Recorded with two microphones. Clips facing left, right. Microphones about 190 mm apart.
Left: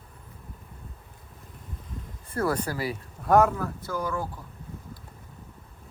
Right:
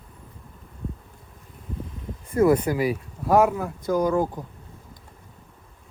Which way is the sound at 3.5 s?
15° right (ahead or behind).